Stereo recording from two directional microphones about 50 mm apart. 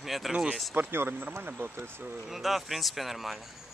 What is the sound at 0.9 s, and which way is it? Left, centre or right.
Speech, right.